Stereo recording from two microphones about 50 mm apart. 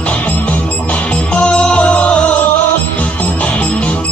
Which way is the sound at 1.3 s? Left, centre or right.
Left.